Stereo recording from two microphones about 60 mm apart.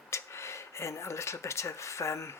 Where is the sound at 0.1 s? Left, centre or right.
Left.